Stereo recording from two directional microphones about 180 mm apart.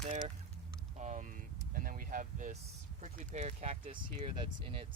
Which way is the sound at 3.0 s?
40° right (ahead or behind).